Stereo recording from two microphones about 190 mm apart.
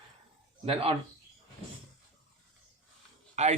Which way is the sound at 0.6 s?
30° right (ahead or behind).